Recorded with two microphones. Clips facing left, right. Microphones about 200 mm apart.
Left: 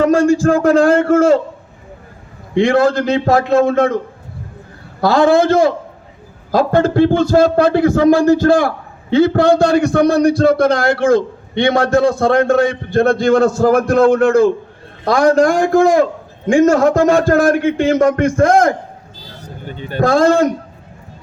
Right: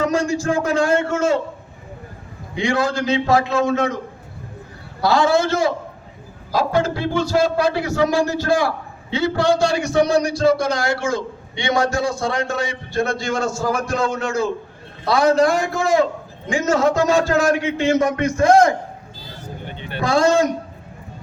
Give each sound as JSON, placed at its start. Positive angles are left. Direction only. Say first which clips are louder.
{"t": 0.0, "sound": "a sound", "louder": "left 8 dB", "side_deg": 55}
{"t": 0.4, "sound": "a man's voice", "louder": "left 8 dB", "side_deg": 55}
{"t": 2.6, "sound": "a man's voice", "louder": "left 8 dB", "side_deg": 55}
{"t": 4.9, "sound": "a man's voice", "louder": "left 5 dB", "side_deg": 50}
{"t": 19.6, "sound": "a man's voice", "louder": "left 8 dB", "side_deg": 40}